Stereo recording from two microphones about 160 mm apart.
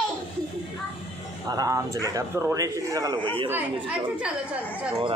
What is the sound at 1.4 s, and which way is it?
A man's voice, 20° right (ahead or behind).